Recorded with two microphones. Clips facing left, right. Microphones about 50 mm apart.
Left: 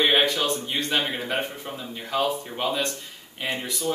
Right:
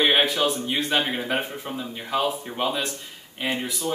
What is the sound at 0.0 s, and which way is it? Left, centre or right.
A man's voice, centre.